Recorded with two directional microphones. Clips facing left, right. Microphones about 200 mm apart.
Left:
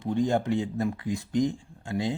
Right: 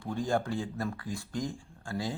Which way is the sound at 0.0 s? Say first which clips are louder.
Left 5 dB; 20° left (ahead or behind).